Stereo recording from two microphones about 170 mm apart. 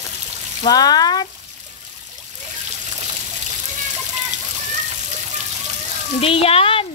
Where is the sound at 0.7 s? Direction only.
25° left (ahead or behind).